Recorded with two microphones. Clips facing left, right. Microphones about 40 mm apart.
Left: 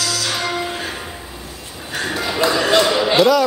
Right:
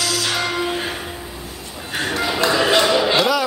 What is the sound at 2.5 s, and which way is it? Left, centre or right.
Basketball bounce, centre.